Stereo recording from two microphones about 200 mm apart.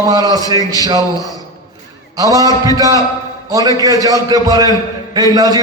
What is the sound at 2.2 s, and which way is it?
A man's voice, 15° right (ahead or behind).